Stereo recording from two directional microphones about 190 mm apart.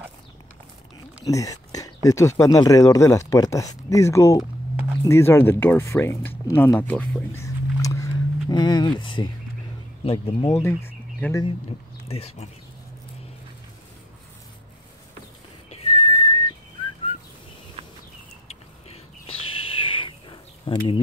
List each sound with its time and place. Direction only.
1.2 s a sound: 15° left (ahead or behind)
2.0 s speech: 15° left (ahead or behind)
10.5 s speech: 15° left (ahead or behind)
12.1 s speech: 30° left (ahead or behind)
15.7 s whistling: 30° left (ahead or behind)
17.8 s a sound: 30° right (ahead or behind)
18.5 s owl: 30° left (ahead or behind)